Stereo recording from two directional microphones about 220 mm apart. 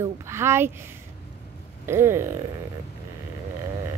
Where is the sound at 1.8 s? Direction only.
10° right (ahead or behind).